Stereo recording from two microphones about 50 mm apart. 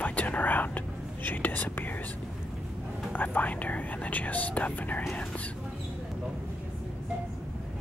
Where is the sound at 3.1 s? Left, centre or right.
Left.